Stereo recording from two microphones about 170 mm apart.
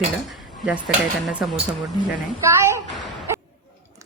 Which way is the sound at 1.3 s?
5° right (ahead or behind).